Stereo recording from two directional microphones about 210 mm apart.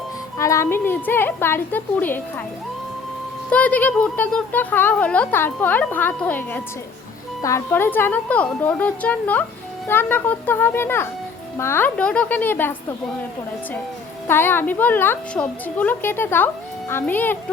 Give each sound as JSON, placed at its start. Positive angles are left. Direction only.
{"t": 0.3, "sound": "speech", "side_deg": 15}
{"t": 3.5, "sound": "speech", "side_deg": 5}
{"t": 14.3, "sound": "speech", "side_deg": 10}